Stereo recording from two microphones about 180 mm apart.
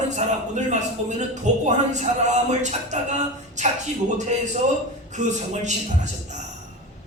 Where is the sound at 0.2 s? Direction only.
40° right (ahead or behind).